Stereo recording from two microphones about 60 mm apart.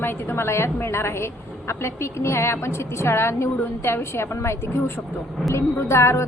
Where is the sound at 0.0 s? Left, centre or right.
Left.